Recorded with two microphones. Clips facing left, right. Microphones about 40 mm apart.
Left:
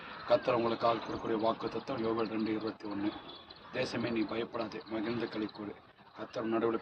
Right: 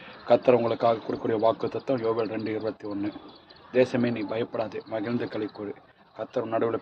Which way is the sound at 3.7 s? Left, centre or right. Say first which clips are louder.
Right 11 dB; right.